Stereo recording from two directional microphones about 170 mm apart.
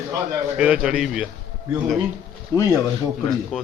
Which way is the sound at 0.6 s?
5° right (ahead or behind).